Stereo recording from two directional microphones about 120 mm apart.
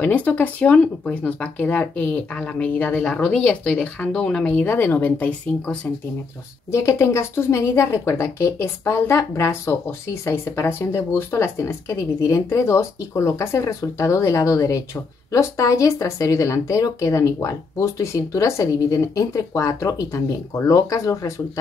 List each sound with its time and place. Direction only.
0.0 s a woman's voice: 15° left (ahead or behind)